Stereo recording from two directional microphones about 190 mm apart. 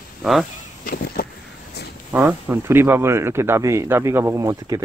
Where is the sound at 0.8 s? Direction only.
50° left (ahead or behind).